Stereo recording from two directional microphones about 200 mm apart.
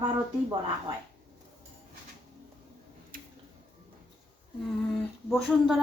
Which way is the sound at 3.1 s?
45° right (ahead or behind).